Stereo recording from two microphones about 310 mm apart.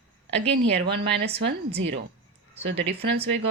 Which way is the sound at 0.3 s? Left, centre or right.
Right.